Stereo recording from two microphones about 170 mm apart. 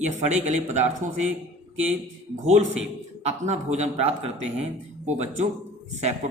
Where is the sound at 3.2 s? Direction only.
40° right (ahead or behind).